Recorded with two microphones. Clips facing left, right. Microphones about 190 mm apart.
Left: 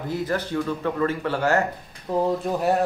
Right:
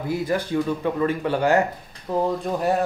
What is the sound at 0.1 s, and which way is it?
Speech, 10° right (ahead or behind).